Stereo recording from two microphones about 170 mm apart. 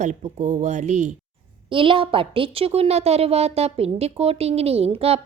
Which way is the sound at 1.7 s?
30° right (ahead or behind).